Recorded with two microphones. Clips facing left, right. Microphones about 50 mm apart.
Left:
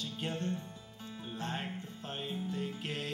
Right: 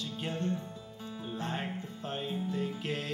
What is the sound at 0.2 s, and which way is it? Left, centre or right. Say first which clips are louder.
Music: right 3 dB; right.